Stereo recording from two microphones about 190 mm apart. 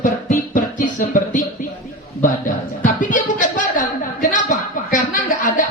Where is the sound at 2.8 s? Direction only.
45° left (ahead or behind).